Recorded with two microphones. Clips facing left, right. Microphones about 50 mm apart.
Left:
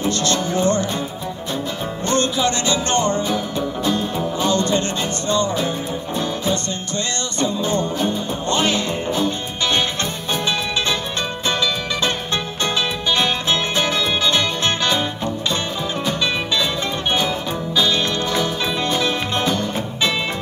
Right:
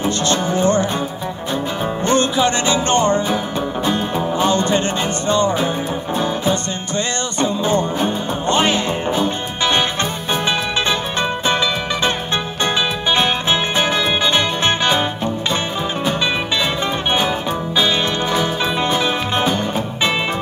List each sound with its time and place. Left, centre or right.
0.0 s music: right
2.0 s music: right
11.4 s music: right
17.7 s music: right